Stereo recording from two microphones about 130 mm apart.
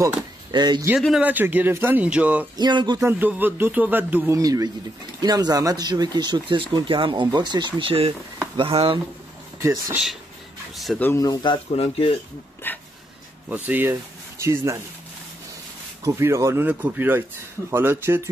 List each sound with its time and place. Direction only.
0.5 s speech: 30° right (ahead or behind)
0.9 s speech: 5° right (ahead or behind)
1.3 s speech: 15° right (ahead or behind)
2.5 s speech: 35° right (ahead or behind)
3.0 s speech: 15° right (ahead or behind)
4.4 s speech: 25° right (ahead or behind); by 9.0 s 45° right (ahead or behind)
9.6 s speech: 20° right (ahead or behind)
11.0 s speech: 15° left (ahead or behind)
11.2 s speech: 40° left (ahead or behind)
12.6 s speech: 15° left (ahead or behind)
13.7 s speech: 15° right (ahead or behind)
16.0 s speech: 25° right (ahead or behind)